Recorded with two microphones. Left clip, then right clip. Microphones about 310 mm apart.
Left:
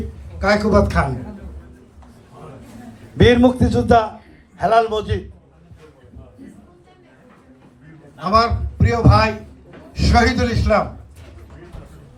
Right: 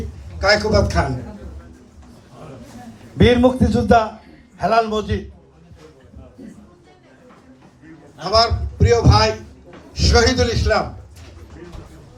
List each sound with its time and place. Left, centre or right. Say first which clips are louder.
0.3 s a man's voice: even; centre
3.2 s a man's voice: left 1 dB; left
8.2 s a man's voice: even; left